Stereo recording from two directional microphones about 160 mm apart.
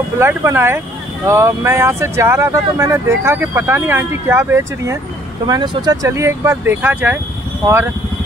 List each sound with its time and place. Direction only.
0.2 s speech: 15° right (ahead or behind)